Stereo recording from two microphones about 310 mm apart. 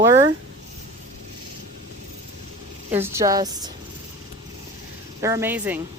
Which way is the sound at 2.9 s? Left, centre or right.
Centre.